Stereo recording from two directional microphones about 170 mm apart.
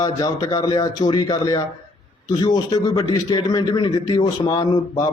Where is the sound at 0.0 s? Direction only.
20° left (ahead or behind).